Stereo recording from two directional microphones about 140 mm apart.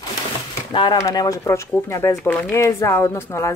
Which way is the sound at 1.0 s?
25° left (ahead or behind).